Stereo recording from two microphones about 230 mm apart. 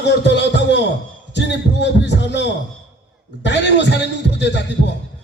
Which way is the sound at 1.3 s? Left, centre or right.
Left.